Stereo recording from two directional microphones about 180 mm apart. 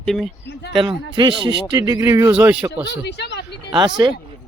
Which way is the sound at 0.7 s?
25° right (ahead or behind).